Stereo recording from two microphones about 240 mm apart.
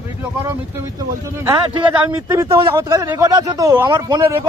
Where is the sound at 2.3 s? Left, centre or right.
Centre.